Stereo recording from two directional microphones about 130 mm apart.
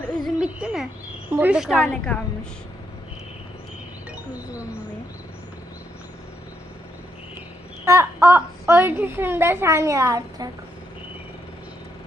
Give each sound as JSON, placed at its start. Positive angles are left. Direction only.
{"t": 0.3, "sound": "speech", "side_deg": -10}
{"t": 1.7, "sound": "a woman's voice", "side_deg": 5}
{"t": 4.3, "sound": "speech", "side_deg": -10}
{"t": 7.9, "sound": "a child's voice", "side_deg": -20}